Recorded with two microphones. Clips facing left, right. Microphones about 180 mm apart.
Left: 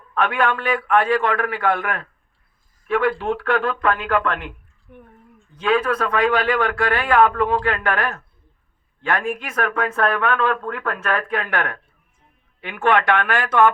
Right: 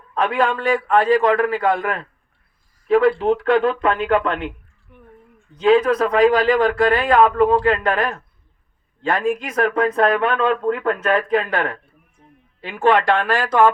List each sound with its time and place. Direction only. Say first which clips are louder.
0.2 s speech: right 2 dB; 30° right (ahead or behind)
5.5 s speech: right 5 dB; 25° right (ahead or behind)